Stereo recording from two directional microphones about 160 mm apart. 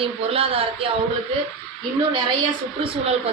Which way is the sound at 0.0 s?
35° right (ahead or behind).